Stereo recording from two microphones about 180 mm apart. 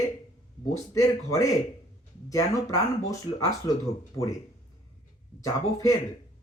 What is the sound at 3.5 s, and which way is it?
Speech, 20° left (ahead or behind).